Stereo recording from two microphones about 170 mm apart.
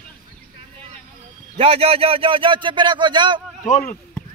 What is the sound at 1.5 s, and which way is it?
A man's voice, 35° right (ahead or behind).